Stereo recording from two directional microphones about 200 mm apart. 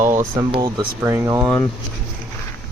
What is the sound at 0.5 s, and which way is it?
Speech, 25° right (ahead or behind).